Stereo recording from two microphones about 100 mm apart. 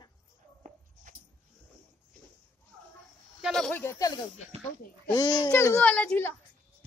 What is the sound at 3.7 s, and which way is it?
Speech, 25° left (ahead or behind).